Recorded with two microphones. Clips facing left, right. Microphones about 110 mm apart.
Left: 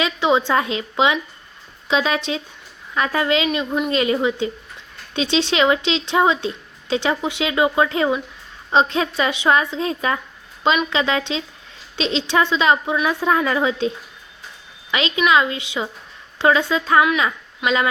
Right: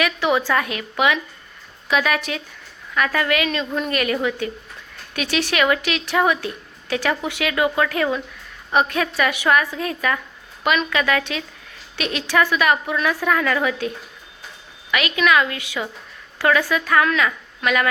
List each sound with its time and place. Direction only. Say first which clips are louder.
0.0 s a woman's voice: left 2 dB; 20° left (ahead or behind)